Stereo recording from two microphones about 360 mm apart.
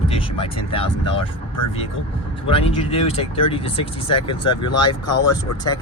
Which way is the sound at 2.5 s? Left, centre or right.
Centre.